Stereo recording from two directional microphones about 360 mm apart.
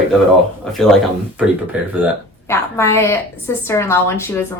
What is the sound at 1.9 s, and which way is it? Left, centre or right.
Speech, centre.